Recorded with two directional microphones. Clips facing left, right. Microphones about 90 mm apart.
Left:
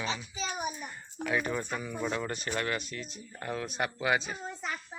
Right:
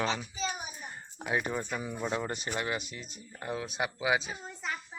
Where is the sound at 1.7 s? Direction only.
20° right (ahead or behind).